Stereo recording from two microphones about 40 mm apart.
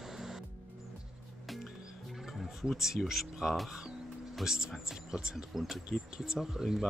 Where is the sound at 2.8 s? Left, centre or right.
Centre.